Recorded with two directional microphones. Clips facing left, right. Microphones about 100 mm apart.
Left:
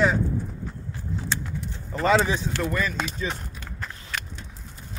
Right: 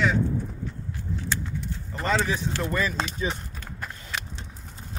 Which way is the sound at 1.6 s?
15° left (ahead or behind).